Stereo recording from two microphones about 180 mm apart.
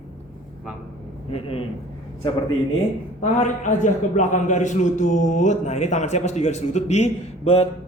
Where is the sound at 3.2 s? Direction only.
45° left (ahead or behind).